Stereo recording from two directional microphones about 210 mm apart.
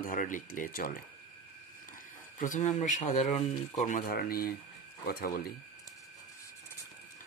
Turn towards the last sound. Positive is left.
turn(degrees=45)  # may be behind; listen again after turning